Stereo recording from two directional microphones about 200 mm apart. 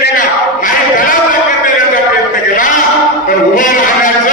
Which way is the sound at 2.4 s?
40° left (ahead or behind).